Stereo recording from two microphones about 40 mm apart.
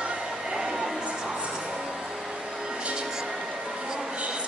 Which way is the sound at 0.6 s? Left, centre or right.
Centre.